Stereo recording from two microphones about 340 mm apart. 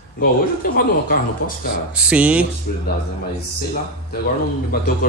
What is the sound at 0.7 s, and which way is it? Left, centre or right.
Speech, left.